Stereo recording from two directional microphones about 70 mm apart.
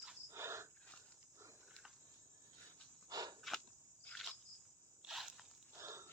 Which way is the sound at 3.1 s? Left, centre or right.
Right.